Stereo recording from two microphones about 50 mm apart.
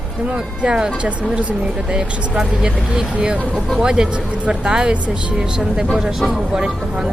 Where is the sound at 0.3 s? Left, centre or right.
Centre.